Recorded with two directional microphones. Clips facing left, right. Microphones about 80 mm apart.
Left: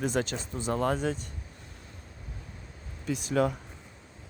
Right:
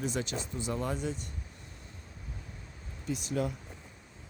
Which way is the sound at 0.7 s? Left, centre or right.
Left.